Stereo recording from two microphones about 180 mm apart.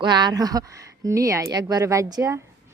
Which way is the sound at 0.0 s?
25° right (ahead or behind).